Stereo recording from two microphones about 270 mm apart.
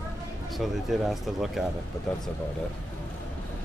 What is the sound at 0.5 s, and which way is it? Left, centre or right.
Speech, centre.